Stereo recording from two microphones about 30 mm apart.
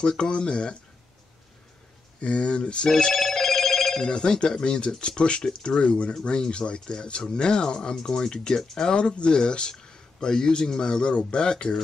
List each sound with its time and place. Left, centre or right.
0.2 s speech: left
2.1 s speech: left
3.2 s telephone bell ringing: centre
4.0 s speech: left
8.9 s speech: left